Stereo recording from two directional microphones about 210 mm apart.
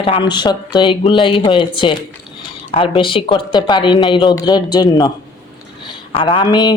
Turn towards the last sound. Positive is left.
turn(degrees=20)  # may be behind; listen again after turning